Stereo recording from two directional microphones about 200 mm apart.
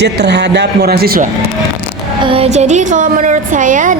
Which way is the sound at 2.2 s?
30° right (ahead or behind).